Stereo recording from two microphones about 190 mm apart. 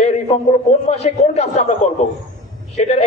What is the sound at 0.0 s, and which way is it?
A man's voice, 35° left (ahead or behind).